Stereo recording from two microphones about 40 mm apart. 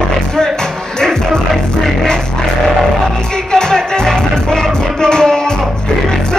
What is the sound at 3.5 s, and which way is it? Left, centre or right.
Music, centre.